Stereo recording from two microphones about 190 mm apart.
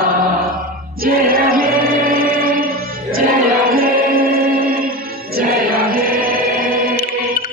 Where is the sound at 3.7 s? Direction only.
50° right (ahead or behind).